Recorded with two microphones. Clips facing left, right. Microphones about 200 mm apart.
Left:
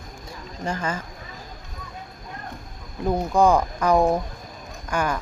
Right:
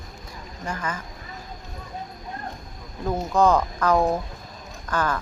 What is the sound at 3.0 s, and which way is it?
Speech, 15° left (ahead or behind).